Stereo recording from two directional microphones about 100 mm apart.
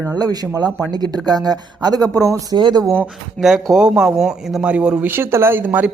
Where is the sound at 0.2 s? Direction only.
40° right (ahead or behind).